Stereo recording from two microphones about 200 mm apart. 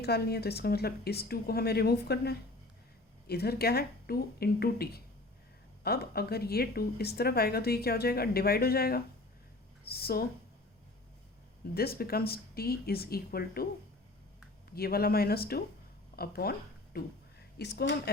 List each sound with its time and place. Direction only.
0.0 s speech: 50° left (ahead or behind)
11.7 s speech: 50° left (ahead or behind)
14.8 s speech: 50° left (ahead or behind)